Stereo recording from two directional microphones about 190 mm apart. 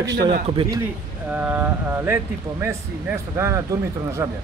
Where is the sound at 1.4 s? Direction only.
10° right (ahead or behind).